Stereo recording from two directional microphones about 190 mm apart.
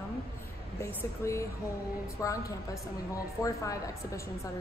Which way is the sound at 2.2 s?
20° left (ahead or behind).